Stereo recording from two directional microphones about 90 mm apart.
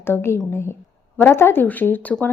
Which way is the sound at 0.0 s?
25° left (ahead or behind).